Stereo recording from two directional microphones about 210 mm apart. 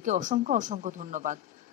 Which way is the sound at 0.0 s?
35° right (ahead or behind).